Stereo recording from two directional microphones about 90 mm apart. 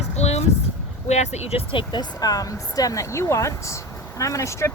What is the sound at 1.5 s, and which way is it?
Speech, 65° left (ahead or behind).